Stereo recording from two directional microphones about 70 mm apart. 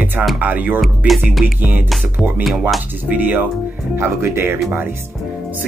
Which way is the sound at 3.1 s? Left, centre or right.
Right.